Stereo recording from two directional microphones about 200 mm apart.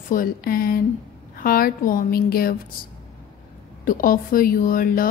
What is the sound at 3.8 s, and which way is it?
Speech, 45° left (ahead or behind).